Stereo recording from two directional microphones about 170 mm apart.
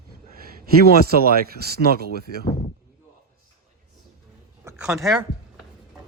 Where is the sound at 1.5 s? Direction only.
65° right (ahead or behind).